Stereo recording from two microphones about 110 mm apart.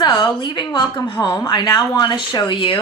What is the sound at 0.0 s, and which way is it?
A woman's voice, 40° left (ahead or behind).